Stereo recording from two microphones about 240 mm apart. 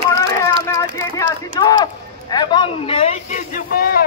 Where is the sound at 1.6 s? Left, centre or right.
Centre; by 4.0 s left.